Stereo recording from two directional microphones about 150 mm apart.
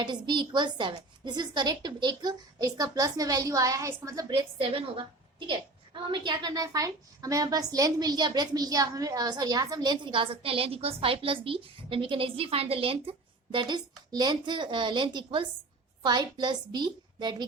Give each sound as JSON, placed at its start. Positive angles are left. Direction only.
{"t": 0.0, "sound": "a woman's voice", "side_deg": -30}